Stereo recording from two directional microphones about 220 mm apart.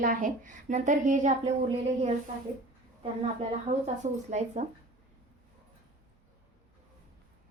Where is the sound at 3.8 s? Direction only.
30° right (ahead or behind).